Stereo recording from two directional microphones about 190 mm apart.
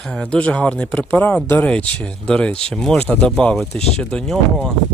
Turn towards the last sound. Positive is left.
turn(degrees=5)  # may be behind; listen again after turning